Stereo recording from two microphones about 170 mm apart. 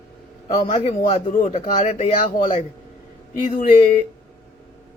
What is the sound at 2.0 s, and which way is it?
Speech, 35° left (ahead or behind).